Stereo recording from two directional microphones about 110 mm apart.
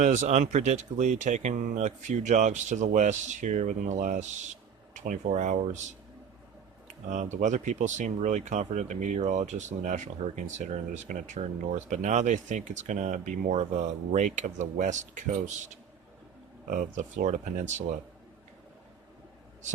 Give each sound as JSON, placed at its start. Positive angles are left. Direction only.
{"t": 0.0, "sound": "speech", "side_deg": -90}
{"t": 7.1, "sound": "speech", "side_deg": -90}
{"t": 17.0, "sound": "speech", "side_deg": -90}